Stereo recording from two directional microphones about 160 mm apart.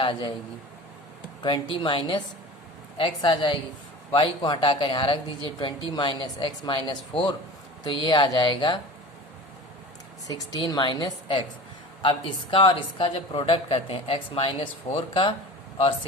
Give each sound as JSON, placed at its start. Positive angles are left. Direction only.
{"t": 0.0, "sound": "a man's voice", "side_deg": 35}
{"t": 1.4, "sound": "a woman's voice", "side_deg": 35}
{"t": 10.2, "sound": "a woman's voice", "side_deg": 25}